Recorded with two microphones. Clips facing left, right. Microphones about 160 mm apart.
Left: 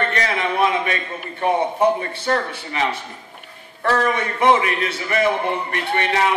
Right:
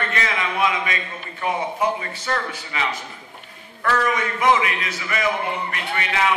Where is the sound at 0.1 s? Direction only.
40° left (ahead or behind).